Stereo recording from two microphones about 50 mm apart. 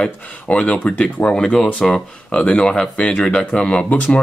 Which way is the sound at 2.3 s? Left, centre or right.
Left.